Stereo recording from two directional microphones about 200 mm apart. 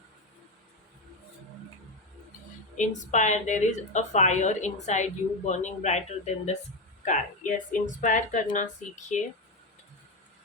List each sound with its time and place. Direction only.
2.7 s a woman's voice: 40° left (ahead or behind)